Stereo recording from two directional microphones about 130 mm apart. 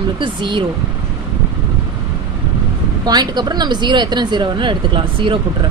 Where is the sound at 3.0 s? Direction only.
30° right (ahead or behind).